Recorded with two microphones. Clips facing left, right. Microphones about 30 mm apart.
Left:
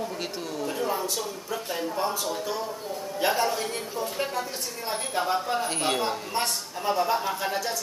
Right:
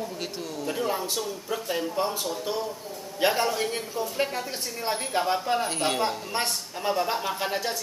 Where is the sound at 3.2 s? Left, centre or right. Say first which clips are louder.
Right 1 dB; centre.